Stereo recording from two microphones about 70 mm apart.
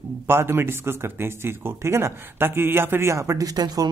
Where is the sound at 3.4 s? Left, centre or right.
Right.